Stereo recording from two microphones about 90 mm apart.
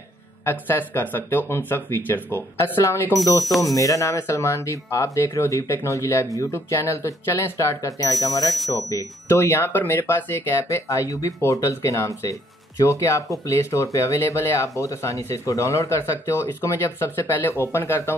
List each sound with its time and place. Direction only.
0.5 s speech: 25° left (ahead or behind)
3.4 s speech: centre (ahead or behind)
3.7 s speech: 40° left (ahead or behind)